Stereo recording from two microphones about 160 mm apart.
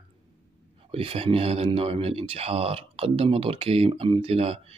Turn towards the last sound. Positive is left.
turn(degrees=-35)  # may be behind; listen again after turning